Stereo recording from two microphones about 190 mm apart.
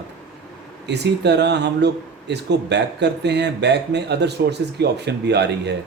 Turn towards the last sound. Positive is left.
turn(degrees=-65)  # may be behind; listen again after turning